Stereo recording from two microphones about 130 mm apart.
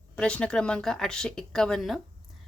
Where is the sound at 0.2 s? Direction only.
10° left (ahead or behind).